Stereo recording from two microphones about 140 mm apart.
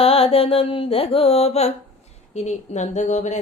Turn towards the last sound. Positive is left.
turn(degrees=55)  # may be behind; listen again after turning